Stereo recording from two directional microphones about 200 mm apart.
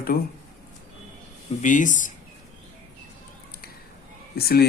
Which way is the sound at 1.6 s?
40° left (ahead or behind).